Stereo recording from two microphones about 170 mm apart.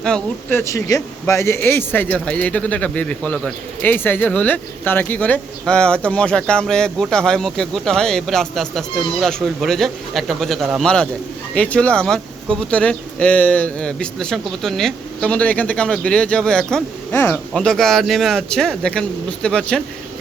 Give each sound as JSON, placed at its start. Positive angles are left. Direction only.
{"t": 0.0, "sound": "speech", "side_deg": 5}
{"t": 0.6, "sound": "speech", "side_deg": 20}